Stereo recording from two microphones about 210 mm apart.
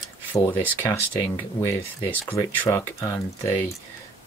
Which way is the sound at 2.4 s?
15° left (ahead or behind).